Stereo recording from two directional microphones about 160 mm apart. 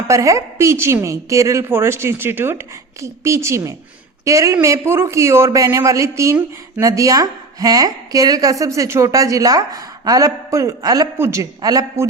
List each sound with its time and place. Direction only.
0.1 s a woman's voice: 20° right (ahead or behind)